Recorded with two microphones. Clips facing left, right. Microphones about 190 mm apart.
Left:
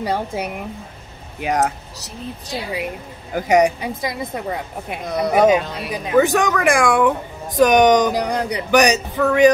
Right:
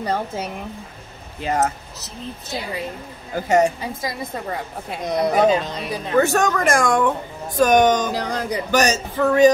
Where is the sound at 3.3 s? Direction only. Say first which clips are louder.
Left 2 dB; 15° left (ahead or behind).